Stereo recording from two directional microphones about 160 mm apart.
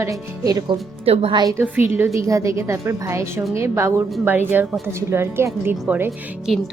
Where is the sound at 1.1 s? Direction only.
35° right (ahead or behind).